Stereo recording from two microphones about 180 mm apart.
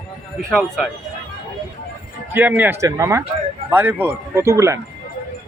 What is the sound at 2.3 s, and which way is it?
Speech, 10° right (ahead or behind).